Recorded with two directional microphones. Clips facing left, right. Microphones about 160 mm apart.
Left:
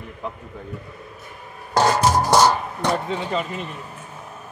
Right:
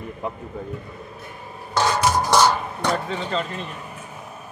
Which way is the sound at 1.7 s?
35° left (ahead or behind).